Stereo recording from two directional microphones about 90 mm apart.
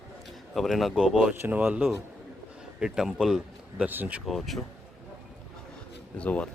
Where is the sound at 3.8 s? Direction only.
20° right (ahead or behind).